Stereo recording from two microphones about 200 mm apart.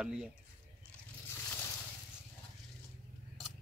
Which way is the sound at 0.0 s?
5° right (ahead or behind).